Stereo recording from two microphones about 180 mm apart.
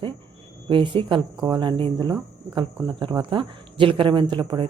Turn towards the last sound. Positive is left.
turn(degrees=-25)  # may be behind; listen again after turning